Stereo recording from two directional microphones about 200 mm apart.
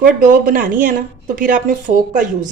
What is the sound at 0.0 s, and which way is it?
A woman's voice, 45° right (ahead or behind).